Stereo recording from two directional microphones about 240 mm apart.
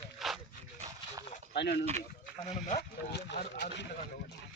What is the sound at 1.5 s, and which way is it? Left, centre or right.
Speech, left.